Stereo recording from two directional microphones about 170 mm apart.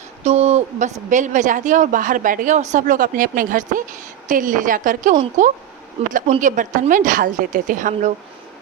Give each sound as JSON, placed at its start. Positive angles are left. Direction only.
{"t": 0.3, "sound": "speech", "side_deg": -40}